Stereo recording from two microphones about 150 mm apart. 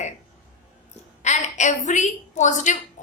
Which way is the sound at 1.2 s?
50° left (ahead or behind).